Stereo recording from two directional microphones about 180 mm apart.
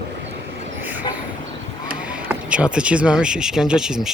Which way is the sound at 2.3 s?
5° right (ahead or behind).